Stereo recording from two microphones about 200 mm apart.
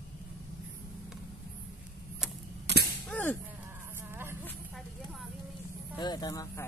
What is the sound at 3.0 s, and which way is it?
Cap gun, 10° left (ahead or behind).